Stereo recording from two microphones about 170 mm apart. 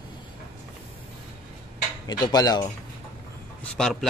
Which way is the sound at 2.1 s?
25° left (ahead or behind).